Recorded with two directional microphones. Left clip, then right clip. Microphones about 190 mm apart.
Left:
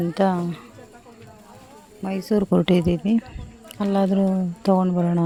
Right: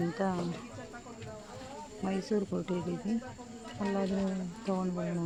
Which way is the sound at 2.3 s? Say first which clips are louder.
Left 16 dB; 50° left (ahead or behind).